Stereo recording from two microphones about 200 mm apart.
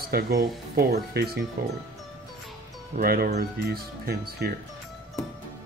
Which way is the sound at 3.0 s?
50° right (ahead or behind).